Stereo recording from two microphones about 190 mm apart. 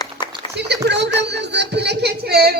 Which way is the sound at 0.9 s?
65° right (ahead or behind).